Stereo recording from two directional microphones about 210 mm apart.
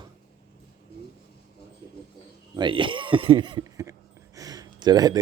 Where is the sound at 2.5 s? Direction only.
25° right (ahead or behind).